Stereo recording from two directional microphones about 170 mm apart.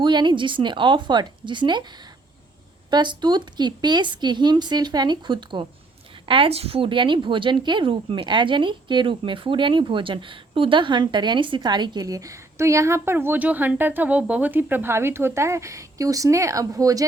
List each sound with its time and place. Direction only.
0.0 s a woman's voice: 25° right (ahead or behind)
2.9 s a woman's voice: 25° right (ahead or behind)